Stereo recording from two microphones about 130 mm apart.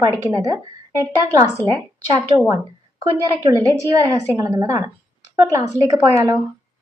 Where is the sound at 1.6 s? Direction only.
30° right (ahead or behind).